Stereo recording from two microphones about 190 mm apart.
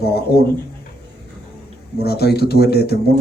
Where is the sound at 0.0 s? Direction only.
55° left (ahead or behind).